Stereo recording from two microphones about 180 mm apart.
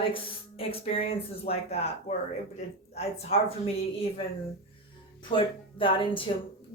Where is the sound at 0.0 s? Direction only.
30° left (ahead or behind).